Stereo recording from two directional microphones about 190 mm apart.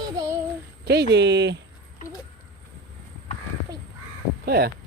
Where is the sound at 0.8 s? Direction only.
60° right (ahead or behind).